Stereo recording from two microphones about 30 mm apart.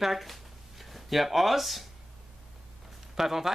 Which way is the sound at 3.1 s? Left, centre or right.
Centre.